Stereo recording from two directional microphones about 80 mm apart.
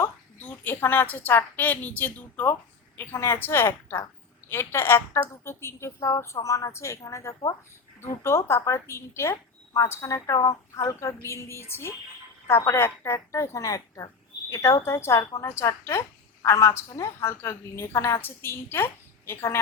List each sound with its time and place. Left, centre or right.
0.3 s a woman's voice: left
10.3 s a woman's voice: left